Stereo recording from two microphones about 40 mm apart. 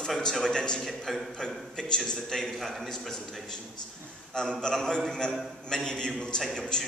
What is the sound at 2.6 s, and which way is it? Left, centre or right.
Speech, centre.